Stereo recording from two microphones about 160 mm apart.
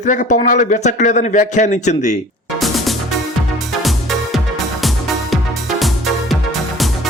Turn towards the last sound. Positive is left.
turn(degrees=0)  # may be behind; listen again after turning